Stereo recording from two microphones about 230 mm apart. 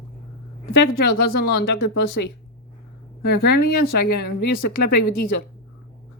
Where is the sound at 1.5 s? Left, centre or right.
Left.